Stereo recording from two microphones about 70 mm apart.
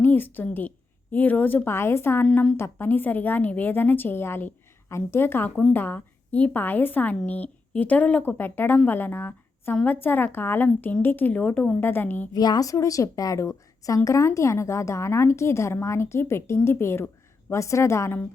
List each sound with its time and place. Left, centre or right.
0.0 s a woman's voice: left
1.7 s a woman's voice: left
2.3 s a woman's voice: centre
2.6 s a woman's voice: left
12.3 s a woman's voice: left
12.7 s a woman's voice: left